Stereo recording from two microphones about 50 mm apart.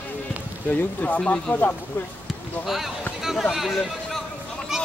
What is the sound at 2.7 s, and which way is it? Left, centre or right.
Speech, centre.